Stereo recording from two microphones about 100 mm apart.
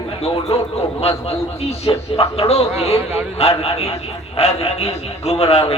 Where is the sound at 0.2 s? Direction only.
90° left.